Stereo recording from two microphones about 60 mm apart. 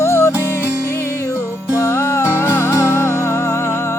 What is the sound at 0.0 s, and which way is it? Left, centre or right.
Music, left.